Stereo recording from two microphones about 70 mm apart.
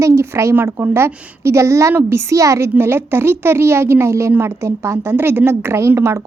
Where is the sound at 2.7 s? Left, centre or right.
Right.